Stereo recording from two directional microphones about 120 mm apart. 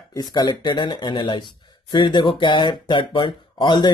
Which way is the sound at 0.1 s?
35° left (ahead or behind).